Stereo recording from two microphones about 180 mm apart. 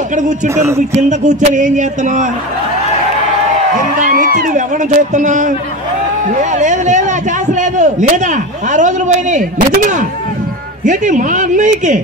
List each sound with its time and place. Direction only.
1.0 s a man's voice: 40° right (ahead or behind)
4.0 s a man's voice: 50° right (ahead or behind)